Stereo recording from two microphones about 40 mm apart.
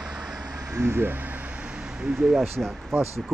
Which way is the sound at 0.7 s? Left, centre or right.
Right.